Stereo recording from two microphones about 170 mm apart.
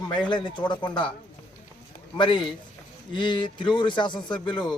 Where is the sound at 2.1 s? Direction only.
30° left (ahead or behind).